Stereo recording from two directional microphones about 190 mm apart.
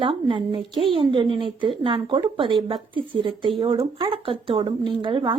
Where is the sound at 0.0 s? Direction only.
25° right (ahead or behind).